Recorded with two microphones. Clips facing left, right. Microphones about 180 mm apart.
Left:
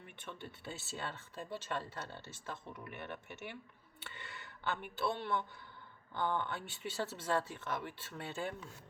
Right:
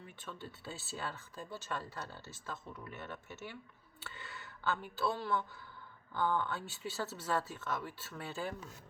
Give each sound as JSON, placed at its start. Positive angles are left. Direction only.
{"t": 0.3, "sound": "speech", "side_deg": 20}
{"t": 4.9, "sound": "speech", "side_deg": 20}